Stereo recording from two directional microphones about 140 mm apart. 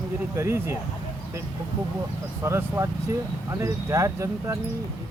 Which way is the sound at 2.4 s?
20° right (ahead or behind).